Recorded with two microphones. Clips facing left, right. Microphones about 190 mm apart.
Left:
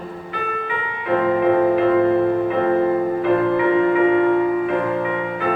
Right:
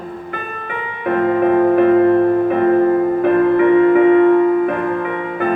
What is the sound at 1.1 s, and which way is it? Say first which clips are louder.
Music: right 2 dB; 55° right (ahead or behind).